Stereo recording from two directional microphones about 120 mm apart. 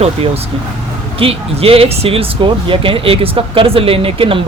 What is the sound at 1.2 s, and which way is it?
Speech, 50° right (ahead or behind).